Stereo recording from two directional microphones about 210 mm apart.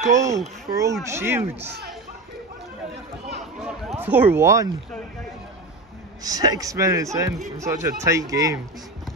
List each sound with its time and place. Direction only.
0.1 s a man's voice: 15° right (ahead or behind)
4.0 s a man's voice: 10° right (ahead or behind)
6.2 s a man's voice: 20° right (ahead or behind)